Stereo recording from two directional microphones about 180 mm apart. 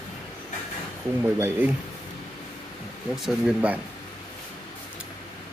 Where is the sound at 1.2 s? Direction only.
10° right (ahead or behind).